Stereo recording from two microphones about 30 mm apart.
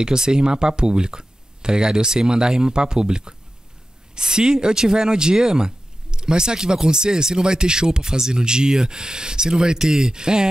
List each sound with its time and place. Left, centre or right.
0.0 s speech: right